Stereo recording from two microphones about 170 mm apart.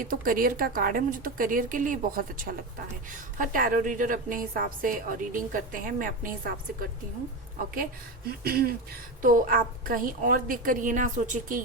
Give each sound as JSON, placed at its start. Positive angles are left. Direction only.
{"t": 0.0, "sound": "a woman's voice", "side_deg": -55}
{"t": 8.3, "sound": "a woman's voice", "side_deg": -65}